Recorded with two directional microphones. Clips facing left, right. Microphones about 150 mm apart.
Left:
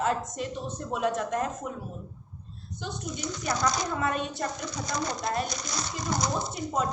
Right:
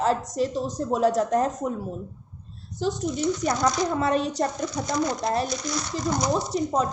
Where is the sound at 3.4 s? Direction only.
35° right (ahead or behind).